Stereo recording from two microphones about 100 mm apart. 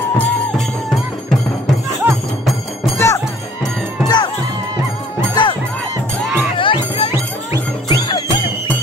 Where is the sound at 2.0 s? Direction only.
20° right (ahead or behind).